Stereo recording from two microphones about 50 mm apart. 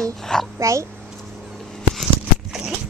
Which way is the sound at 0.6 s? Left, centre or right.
Right.